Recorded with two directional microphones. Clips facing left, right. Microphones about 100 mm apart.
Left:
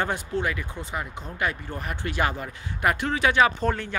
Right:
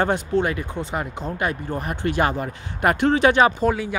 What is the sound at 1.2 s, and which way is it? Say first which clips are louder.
Speech: right 3 dB; 35° right (ahead or behind).